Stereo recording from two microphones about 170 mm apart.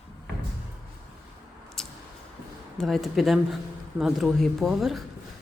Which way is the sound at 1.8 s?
5° left (ahead or behind).